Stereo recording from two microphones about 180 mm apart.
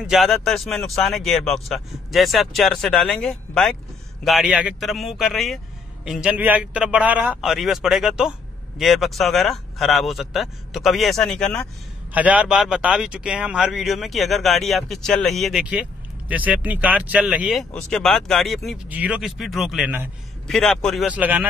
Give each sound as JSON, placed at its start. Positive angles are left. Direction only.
{"t": 0.0, "sound": "speech", "side_deg": 0}
{"t": 12.1, "sound": "speech", "side_deg": -10}